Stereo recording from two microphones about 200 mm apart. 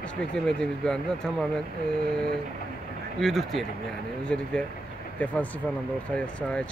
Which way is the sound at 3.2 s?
Centre (ahead or behind).